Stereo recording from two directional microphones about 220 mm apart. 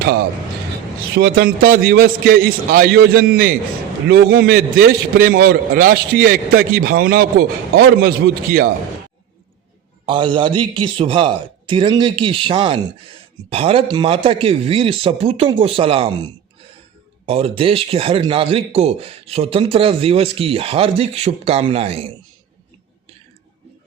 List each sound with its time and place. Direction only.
1.1 s a man's voice: 50° right (ahead or behind)
10.1 s speech: 20° right (ahead or behind)